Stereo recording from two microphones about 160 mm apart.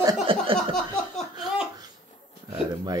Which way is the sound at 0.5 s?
5° left (ahead or behind).